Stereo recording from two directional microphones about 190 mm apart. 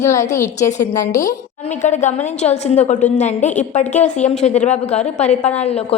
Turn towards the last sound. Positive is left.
turn(degrees=35)  # may be behind; listen again after turning